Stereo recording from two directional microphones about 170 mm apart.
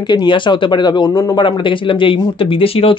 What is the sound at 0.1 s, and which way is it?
Speech, 25° left (ahead or behind).